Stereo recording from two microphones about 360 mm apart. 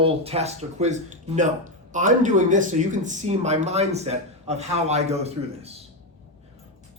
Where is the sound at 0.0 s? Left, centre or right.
Centre.